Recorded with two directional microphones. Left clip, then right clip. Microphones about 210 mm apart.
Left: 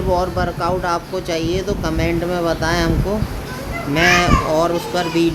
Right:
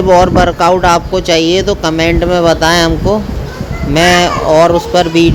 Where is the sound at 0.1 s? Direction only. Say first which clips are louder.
Right 12 dB; 30° right (ahead or behind).